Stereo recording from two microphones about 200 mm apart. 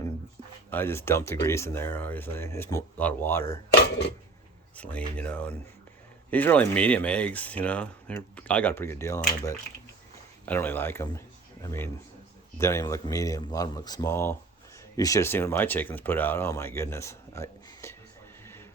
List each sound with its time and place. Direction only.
0.7 s speech: 10° left (ahead or behind)
4.8 s speech: 5° left (ahead or behind)